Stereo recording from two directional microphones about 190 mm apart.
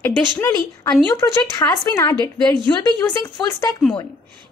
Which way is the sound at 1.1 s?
20° left (ahead or behind).